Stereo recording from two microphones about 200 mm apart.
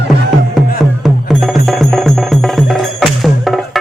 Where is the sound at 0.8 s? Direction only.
Centre (ahead or behind).